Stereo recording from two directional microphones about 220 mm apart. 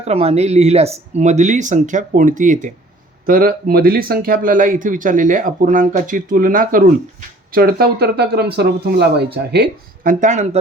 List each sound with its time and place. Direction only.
0.0 s speech: 30° right (ahead or behind)